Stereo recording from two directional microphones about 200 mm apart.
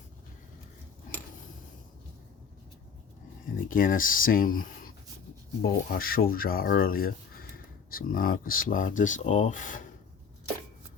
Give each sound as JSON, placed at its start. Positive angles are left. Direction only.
{"t": 3.7, "sound": "speech", "side_deg": 45}
{"t": 5.6, "sound": "speech", "side_deg": 50}